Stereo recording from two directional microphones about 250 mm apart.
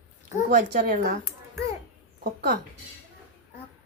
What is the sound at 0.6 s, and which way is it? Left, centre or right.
Speech, right.